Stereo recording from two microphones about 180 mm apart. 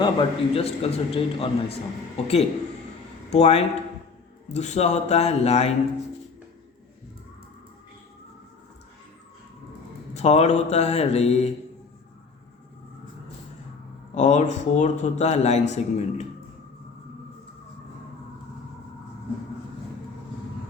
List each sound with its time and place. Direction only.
0.0 s speech: 30° left (ahead or behind)
10.2 s speech: 40° left (ahead or behind)
14.2 s speech: 40° left (ahead or behind)